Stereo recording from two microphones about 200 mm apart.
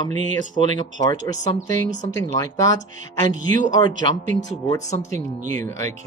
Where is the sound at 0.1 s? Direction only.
35° right (ahead or behind).